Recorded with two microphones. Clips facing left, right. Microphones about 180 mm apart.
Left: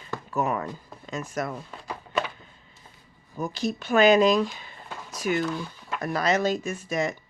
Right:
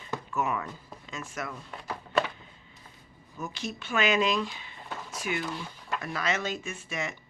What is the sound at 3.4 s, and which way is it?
Speech, 35° left (ahead or behind).